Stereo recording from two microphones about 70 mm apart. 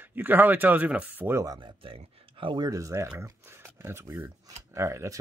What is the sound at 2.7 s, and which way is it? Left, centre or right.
Speech, right.